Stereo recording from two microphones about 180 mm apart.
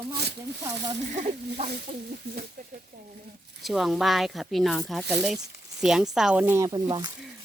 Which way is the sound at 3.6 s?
Centre (ahead or behind).